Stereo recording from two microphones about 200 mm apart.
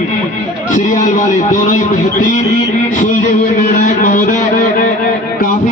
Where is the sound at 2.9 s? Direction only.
40° left (ahead or behind).